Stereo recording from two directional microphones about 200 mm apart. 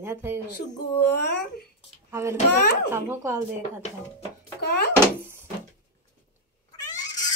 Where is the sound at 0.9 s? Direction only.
55° left (ahead or behind).